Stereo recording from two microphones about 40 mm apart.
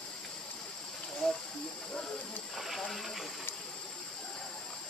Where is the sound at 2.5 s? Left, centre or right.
Centre.